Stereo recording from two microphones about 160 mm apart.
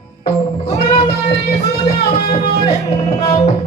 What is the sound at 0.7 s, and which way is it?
Child singing, 35° left (ahead or behind).